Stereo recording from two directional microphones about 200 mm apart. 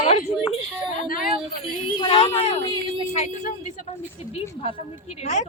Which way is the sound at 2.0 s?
30° left (ahead or behind).